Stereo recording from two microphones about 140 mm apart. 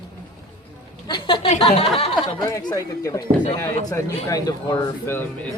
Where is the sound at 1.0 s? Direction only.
35° left (ahead or behind).